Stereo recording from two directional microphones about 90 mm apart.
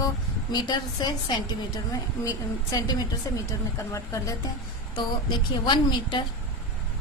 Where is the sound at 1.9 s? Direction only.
40° left (ahead or behind).